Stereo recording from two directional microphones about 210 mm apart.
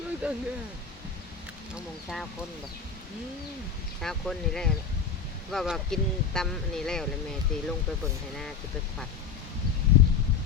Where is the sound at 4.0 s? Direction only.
Centre (ahead or behind).